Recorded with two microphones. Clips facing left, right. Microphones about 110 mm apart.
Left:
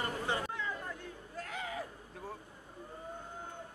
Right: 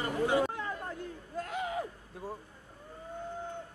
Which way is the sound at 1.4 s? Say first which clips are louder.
Right 6 dB; 20° right (ahead or behind).